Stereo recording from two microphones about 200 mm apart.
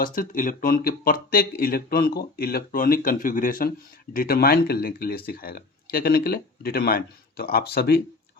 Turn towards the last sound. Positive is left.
turn(degrees=50)  # may be behind; listen again after turning